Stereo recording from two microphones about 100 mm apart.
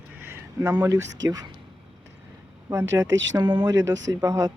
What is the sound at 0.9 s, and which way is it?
Speech, 35° right (ahead or behind).